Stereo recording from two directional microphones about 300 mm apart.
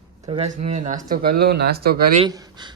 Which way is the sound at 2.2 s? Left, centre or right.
Centre.